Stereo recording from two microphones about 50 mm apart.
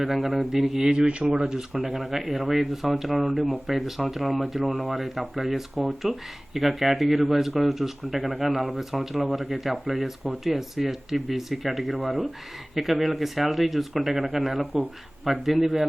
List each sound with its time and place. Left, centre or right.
0.0 s speech: centre
0.9 s speech: right
1.5 s speech: centre
1.8 s speech: centre